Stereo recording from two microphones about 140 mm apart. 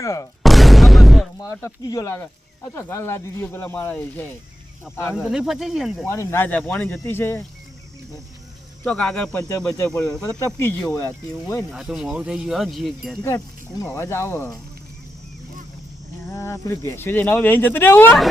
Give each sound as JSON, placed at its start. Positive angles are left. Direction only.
{"t": 0.0, "sound": "speech", "side_deg": 20}
{"t": 0.4, "sound": "boom", "side_deg": 0}
{"t": 1.4, "sound": "speech", "side_deg": 25}
{"t": 5.1, "sound": "speech", "side_deg": -5}
{"t": 6.1, "sound": "speech", "side_deg": 15}
{"t": 8.8, "sound": "speech", "side_deg": 5}
{"t": 9.3, "sound": "speech", "side_deg": 20}
{"t": 11.5, "sound": "speech", "side_deg": 0}
{"t": 13.2, "sound": "speech", "side_deg": 25}
{"t": 16.2, "sound": "speech", "side_deg": 20}